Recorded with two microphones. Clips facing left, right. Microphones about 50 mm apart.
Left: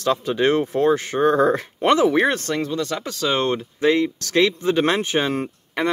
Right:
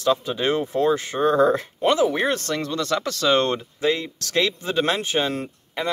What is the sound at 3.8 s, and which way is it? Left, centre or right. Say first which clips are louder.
Speech: left 7 dB; left.